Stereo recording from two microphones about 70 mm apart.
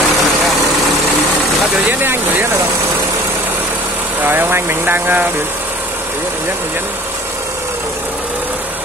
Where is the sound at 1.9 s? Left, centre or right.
Right.